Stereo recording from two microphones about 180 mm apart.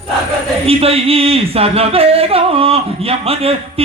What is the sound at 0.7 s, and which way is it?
Speech, 35° right (ahead or behind).